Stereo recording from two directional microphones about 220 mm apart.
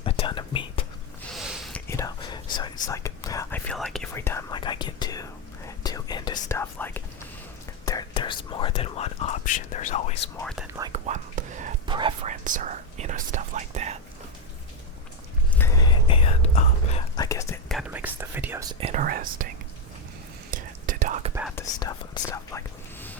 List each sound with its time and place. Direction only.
0.0 s whispering: 25° left (ahead or behind)
1.3 s a sound: centre (ahead or behind)
1.9 s whispering: 15° left (ahead or behind)
3.7 s whispering: 5° left (ahead or behind); by 10.2 s 30° left (ahead or behind)
10.4 s speech: centre (ahead or behind)
10.9 s whispering: 30° right (ahead or behind)
11.9 s whispering: 20° right (ahead or behind)
12.3 s whispering: 35° right (ahead or behind)
15.5 s whispering: 15° left (ahead or behind); by 17.0 s 30° left (ahead or behind)
17.2 s whispering: 15° left (ahead or behind)
17.7 s whispering: 5° right (ahead or behind)
18.8 s whispering: 35° right (ahead or behind)
20.5 s whispering: 35° right (ahead or behind)
21.5 s whispering: 15° left (ahead or behind)